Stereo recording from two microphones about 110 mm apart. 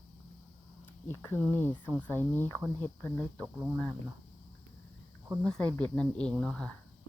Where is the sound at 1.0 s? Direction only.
20° left (ahead or behind).